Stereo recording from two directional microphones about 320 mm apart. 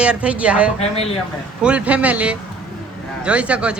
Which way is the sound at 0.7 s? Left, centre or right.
Centre.